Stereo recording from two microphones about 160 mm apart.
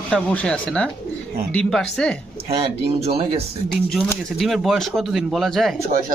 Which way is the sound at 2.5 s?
40° right (ahead or behind).